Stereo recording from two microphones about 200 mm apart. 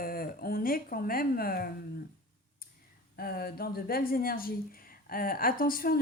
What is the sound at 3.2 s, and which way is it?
A woman's voice, 50° left (ahead or behind).